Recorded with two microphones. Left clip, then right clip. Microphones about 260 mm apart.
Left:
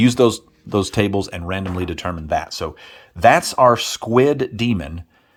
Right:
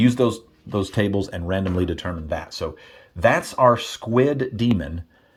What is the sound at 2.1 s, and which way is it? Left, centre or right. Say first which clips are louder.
Speech: left 6 dB; centre.